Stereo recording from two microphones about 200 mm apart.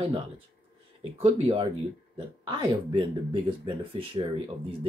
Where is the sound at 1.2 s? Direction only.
30° right (ahead or behind).